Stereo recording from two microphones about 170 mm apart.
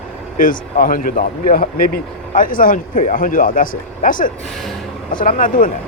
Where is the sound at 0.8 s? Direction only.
55° left (ahead or behind).